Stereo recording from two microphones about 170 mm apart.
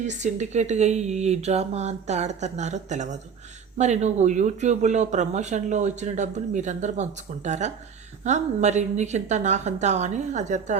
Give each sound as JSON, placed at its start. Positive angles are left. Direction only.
{"t": 0.1, "sound": "speech", "side_deg": -45}